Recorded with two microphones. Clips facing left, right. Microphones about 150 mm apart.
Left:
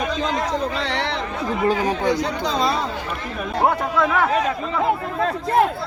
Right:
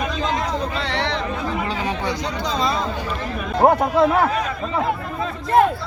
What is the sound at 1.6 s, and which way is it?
Speech, 45° left (ahead or behind).